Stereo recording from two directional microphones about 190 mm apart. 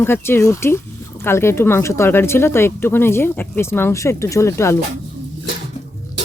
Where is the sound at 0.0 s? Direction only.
10° left (ahead or behind).